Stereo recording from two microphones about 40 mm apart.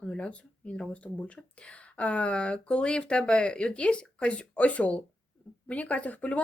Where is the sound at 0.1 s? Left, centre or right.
Left.